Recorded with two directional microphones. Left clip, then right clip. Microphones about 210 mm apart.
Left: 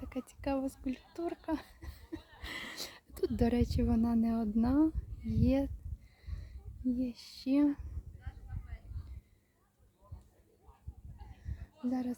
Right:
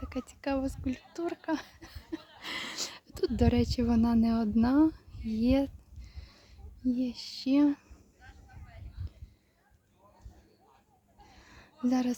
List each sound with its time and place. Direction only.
0.0 s speech: 5° right (ahead or behind)
6.8 s speech: 10° right (ahead or behind)
11.5 s a sound: 25° right (ahead or behind)